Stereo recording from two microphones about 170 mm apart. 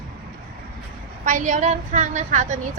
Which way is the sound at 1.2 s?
45° right (ahead or behind).